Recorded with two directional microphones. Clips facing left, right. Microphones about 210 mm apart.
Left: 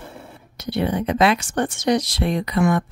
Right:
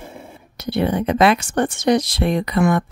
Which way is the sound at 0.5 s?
60° right (ahead or behind).